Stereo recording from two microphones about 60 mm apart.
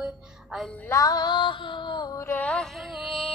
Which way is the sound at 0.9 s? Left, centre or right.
Left.